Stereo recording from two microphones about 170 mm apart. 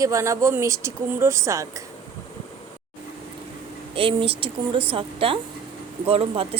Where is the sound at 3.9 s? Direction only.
30° right (ahead or behind).